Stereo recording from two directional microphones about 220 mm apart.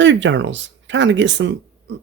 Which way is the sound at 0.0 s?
55° right (ahead or behind).